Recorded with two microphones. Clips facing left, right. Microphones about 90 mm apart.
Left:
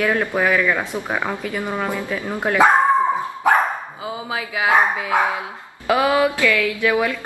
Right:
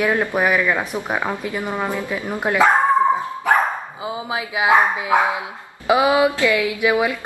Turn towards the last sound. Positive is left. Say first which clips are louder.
# right 1 dB
turn(degrees=-20)  # may be behind; listen again after turning